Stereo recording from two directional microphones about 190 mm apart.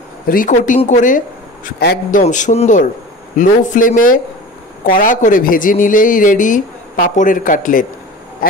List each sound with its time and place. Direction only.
0.3 s a man's voice: 45° left (ahead or behind)